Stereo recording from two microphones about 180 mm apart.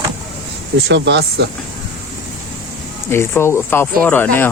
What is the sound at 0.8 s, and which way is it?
Speech, 75° right (ahead or behind).